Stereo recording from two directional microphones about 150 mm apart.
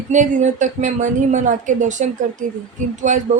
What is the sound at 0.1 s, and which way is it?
A woman's voice, 55° right (ahead or behind).